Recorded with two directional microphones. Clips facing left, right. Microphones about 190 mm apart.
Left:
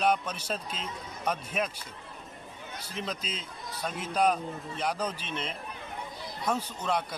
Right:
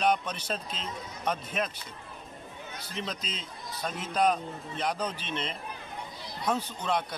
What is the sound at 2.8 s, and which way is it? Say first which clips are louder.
Speech: left 1 dB; 5° left (ahead or behind).